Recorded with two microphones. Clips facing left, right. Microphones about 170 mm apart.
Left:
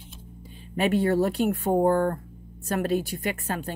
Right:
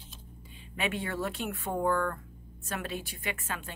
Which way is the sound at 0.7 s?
40° left (ahead or behind).